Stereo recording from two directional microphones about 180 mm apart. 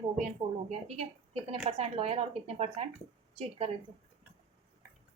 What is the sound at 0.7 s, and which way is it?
A woman's voice, 35° right (ahead or behind).